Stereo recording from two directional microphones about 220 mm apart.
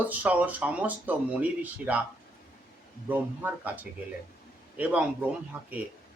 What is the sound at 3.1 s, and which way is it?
Speech, 10° right (ahead or behind).